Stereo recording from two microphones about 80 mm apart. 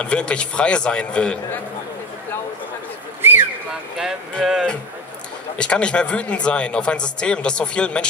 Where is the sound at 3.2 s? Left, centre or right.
Right.